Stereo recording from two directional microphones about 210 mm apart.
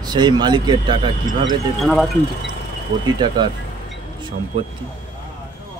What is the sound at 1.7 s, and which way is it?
Speech, centre (ahead or behind).